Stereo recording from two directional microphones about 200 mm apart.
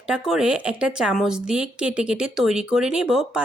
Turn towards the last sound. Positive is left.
turn(degrees=-5)  # may be behind; listen again after turning